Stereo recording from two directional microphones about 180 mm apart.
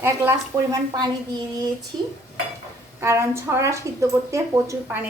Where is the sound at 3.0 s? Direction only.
15° right (ahead or behind).